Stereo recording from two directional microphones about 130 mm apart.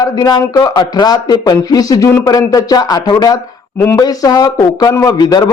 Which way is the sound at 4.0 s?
30° left (ahead or behind).